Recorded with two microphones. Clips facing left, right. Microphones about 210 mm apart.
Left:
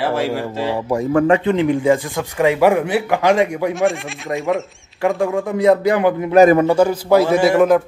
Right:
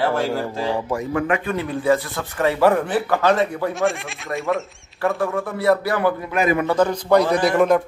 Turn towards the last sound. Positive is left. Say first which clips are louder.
# left 4 dB
turn(degrees=0)  # may be behind; listen again after turning